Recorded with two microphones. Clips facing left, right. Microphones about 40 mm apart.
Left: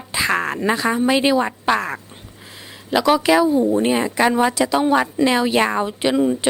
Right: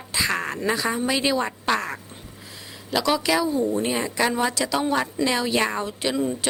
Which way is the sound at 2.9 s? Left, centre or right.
Left.